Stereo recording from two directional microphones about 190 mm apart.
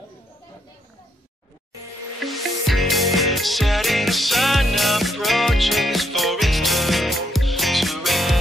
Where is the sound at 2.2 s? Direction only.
Centre (ahead or behind).